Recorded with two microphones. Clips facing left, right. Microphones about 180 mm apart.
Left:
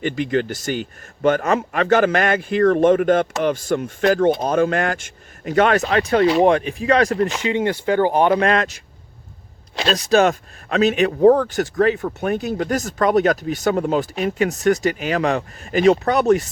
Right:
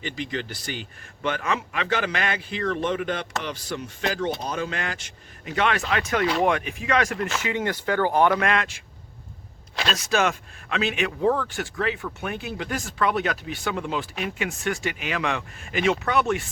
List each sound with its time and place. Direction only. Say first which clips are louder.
0.0 s a man's voice: left 10 dB; 50° left (ahead or behind); by 8.3 s 15° left (ahead or behind)
8.3 s speech: left 6 dB; 35° left (ahead or behind)